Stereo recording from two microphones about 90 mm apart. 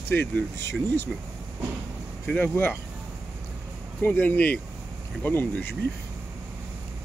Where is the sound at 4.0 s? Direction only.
20° left (ahead or behind).